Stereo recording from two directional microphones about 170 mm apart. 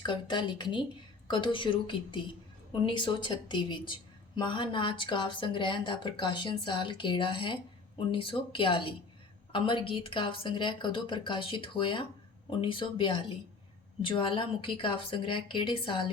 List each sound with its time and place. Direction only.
0.0 s speech: 25° left (ahead or behind)